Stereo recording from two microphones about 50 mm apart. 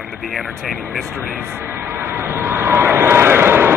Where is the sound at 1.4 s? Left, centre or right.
Right.